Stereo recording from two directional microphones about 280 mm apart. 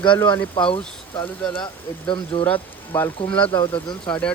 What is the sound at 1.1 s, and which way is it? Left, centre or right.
Speech, centre.